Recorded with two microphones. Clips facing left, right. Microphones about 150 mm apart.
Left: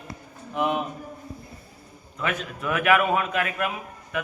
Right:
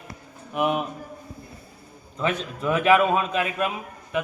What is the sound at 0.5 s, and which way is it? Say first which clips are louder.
Speech: right 1 dB; 15° right (ahead or behind).